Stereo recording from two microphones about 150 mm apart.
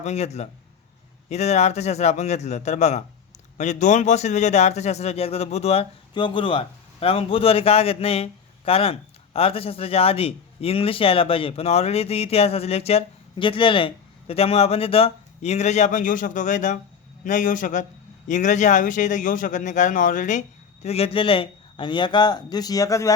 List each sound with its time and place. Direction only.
0.0 s a man's voice: 45° left (ahead or behind)
20.8 s a man's voice: 40° left (ahead or behind); by 23.1 s 20° left (ahead or behind)